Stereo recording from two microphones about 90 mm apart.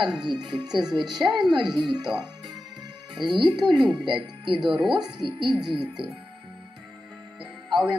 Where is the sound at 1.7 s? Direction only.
55° right (ahead or behind).